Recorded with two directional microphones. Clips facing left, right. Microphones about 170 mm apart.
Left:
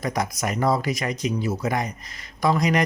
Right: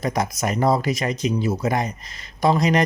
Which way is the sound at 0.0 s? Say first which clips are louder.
Right 3 dB; 25° right (ahead or behind).